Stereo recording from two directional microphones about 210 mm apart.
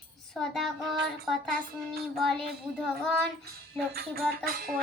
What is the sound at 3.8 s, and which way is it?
Music, 45° right (ahead or behind).